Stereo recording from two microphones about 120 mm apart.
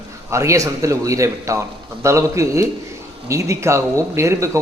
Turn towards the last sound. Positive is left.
turn(degrees=-25)  # may be behind; listen again after turning